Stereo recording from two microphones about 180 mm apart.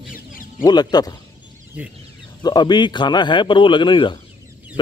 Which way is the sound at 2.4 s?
25° left (ahead or behind).